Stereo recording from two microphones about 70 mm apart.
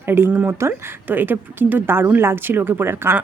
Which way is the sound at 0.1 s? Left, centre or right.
Right.